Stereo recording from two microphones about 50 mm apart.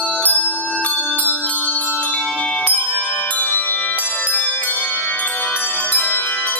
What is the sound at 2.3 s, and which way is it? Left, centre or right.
Music, centre.